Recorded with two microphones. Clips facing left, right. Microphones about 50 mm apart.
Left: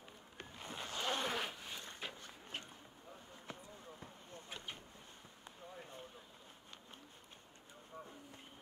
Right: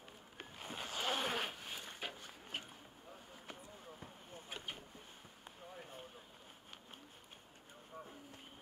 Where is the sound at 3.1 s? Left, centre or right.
Centre.